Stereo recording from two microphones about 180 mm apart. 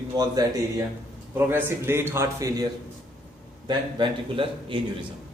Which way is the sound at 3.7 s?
25° right (ahead or behind).